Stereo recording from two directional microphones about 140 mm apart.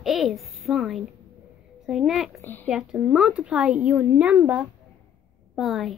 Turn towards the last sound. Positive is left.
turn(degrees=0)  # may be behind; listen again after turning